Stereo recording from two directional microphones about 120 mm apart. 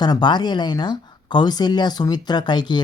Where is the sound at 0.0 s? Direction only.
35° left (ahead or behind).